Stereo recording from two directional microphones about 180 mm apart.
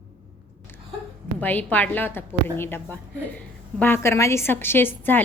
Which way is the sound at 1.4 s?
10° left (ahead or behind).